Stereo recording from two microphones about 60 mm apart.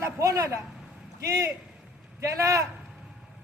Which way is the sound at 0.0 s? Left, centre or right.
Right.